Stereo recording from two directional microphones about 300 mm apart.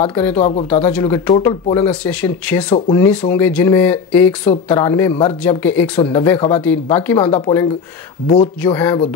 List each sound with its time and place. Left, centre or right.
0.4 s speech: left
0.8 s speech: centre